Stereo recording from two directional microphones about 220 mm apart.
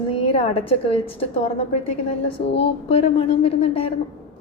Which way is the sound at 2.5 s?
30° left (ahead or behind).